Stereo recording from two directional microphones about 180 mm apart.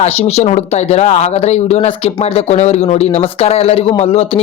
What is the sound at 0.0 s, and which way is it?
A man's voice, 35° left (ahead or behind).